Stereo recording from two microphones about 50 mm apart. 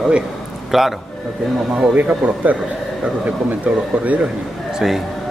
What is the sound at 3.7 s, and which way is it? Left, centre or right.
Speech, right.